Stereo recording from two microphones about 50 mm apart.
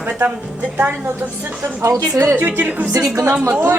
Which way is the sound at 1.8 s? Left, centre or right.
Right.